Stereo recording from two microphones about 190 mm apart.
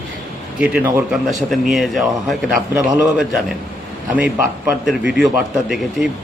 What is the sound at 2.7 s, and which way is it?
Speech, 15° right (ahead or behind).